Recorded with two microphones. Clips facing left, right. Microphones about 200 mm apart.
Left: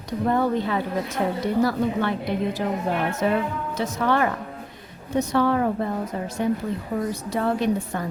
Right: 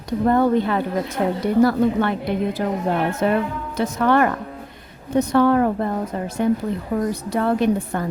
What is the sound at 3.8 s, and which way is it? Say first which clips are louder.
A woman's voice: right 5 dB; 55° right (ahead or behind).